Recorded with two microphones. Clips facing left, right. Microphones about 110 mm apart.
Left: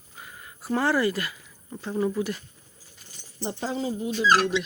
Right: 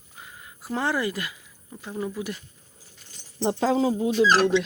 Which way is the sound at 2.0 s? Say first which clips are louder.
Left 5 dB; centre (ahead or behind).